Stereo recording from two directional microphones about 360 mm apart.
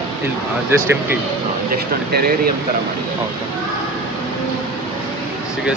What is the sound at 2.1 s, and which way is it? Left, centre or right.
Speech, right.